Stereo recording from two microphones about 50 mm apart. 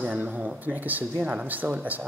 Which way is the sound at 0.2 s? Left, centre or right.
Right.